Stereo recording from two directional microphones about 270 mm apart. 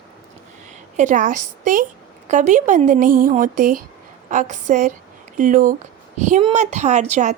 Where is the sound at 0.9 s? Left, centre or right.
Right.